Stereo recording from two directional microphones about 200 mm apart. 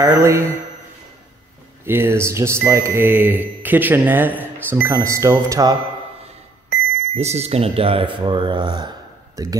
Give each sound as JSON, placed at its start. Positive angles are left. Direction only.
{"t": 0.0, "sound": "speech", "side_deg": -15}
{"t": 1.9, "sound": "speech", "side_deg": -10}
{"t": 7.2, "sound": "speech", "side_deg": -30}